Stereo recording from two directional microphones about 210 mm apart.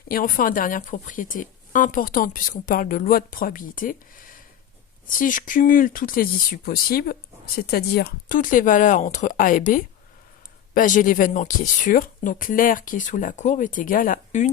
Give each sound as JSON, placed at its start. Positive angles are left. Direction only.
{"t": 0.1, "sound": "speech", "side_deg": 45}